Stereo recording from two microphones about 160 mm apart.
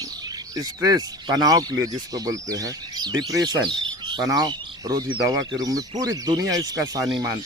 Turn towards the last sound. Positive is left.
turn(degrees=-25)  # may be behind; listen again after turning